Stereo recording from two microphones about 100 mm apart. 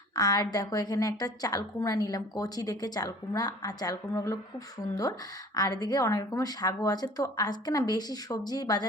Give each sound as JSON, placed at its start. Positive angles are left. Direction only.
{"t": 0.2, "sound": "a woman's voice", "side_deg": 40}
{"t": 5.5, "sound": "a woman's voice", "side_deg": 40}